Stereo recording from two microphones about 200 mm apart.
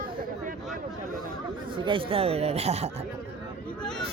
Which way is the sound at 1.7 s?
25° right (ahead or behind).